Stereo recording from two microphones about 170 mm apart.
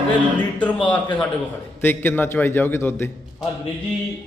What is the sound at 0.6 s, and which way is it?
A man's voice, 10° left (ahead or behind).